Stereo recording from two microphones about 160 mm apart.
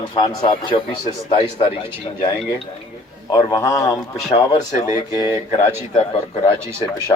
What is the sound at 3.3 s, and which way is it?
Speech, 20° left (ahead or behind).